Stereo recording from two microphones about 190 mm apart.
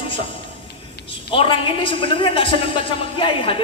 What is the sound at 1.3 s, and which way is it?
A man's voice, 25° left (ahead or behind).